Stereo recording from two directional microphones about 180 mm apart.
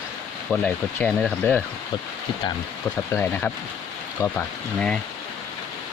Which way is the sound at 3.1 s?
10° left (ahead or behind).